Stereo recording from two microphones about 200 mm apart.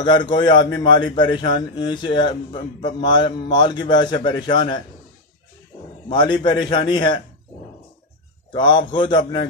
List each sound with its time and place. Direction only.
0.0 s a man's voice: 20° left (ahead or behind)
6.0 s a man's voice: 25° left (ahead or behind)
8.5 s a man's voice: 20° left (ahead or behind)